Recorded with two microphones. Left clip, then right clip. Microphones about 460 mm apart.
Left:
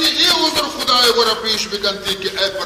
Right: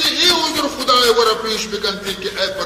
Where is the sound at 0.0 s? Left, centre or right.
Centre.